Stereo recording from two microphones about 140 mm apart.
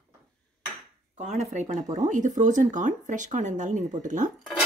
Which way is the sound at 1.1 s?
55° right (ahead or behind).